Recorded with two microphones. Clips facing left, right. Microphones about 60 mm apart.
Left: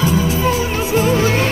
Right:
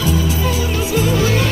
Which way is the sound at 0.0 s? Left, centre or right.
Left.